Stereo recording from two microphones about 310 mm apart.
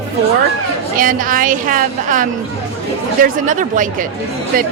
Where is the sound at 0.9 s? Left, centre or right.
Right.